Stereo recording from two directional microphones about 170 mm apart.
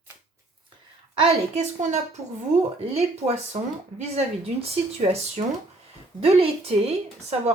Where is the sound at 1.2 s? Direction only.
35° right (ahead or behind).